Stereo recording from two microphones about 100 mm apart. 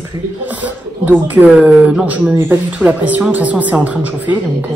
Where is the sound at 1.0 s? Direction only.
15° right (ahead or behind).